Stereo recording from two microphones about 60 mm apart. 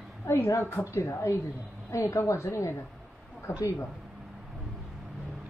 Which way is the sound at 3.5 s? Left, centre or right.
Left.